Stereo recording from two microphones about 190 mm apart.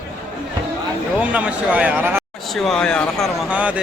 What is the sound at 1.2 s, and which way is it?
A man's voice, 5° right (ahead or behind).